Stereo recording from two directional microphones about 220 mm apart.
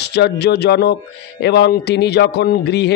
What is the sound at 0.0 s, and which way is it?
Speech, 50° left (ahead or behind).